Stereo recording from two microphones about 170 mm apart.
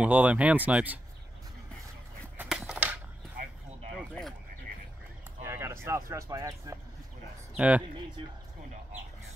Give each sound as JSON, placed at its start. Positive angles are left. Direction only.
{"t": 0.0, "sound": "speech", "side_deg": -10}
{"t": 2.3, "sound": "a sound", "side_deg": -5}
{"t": 5.4, "sound": "speech", "side_deg": -15}
{"t": 7.5, "sound": "speech", "side_deg": -10}